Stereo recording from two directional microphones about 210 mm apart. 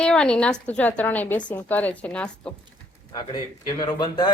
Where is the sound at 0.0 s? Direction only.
5° left (ahead or behind).